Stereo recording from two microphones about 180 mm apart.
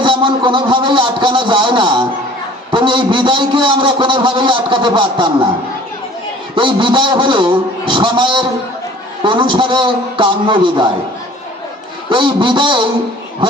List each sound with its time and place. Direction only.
0.0 s a man's voice: 25° right (ahead or behind)
6.6 s a man's voice: 25° right (ahead or behind)
12.0 s a man's voice: 25° right (ahead or behind)